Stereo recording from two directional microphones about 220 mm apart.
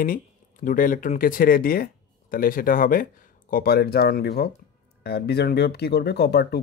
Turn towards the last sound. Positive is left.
turn(degrees=45)  # may be behind; listen again after turning